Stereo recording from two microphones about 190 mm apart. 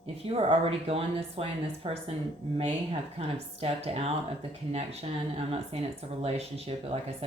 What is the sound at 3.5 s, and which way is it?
Speech, 30° right (ahead or behind).